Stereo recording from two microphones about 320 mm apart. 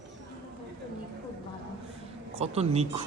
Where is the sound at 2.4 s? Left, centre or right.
Centre.